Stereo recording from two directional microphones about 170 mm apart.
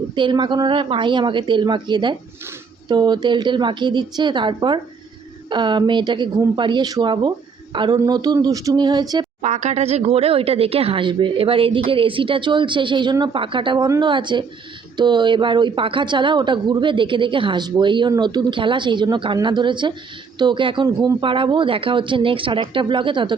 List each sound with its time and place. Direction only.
0.1 s a woman's voice: 25° right (ahead or behind)
9.4 s a woman's voice: 45° right (ahead or behind)